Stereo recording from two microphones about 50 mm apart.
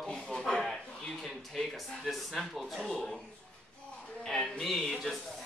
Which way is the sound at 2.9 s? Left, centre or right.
Centre.